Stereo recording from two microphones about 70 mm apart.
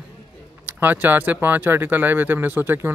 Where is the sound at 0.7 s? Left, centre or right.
Right.